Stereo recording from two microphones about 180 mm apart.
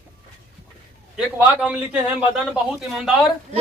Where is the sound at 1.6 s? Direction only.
5° right (ahead or behind).